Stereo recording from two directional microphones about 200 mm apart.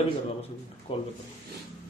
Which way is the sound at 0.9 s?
30° left (ahead or behind).